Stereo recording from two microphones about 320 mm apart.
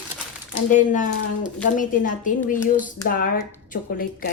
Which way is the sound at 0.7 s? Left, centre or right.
Left.